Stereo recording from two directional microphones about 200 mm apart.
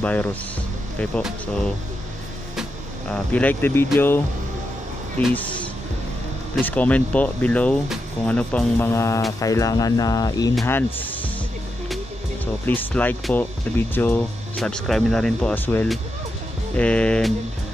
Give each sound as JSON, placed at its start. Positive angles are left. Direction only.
{"t": 0.0, "sound": "speech", "side_deg": 5}
{"t": 3.1, "sound": "speech", "side_deg": 5}
{"t": 6.6, "sound": "speech", "side_deg": 5}
{"t": 12.6, "sound": "speech", "side_deg": 10}